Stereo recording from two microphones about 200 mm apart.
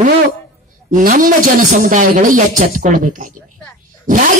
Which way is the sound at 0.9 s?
40° right (ahead or behind).